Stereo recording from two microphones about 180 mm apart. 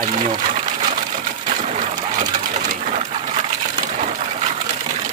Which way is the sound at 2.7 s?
40° right (ahead or behind).